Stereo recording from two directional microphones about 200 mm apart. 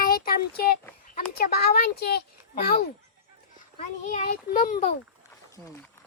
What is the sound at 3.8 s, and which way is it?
A child's voice, 35° left (ahead or behind).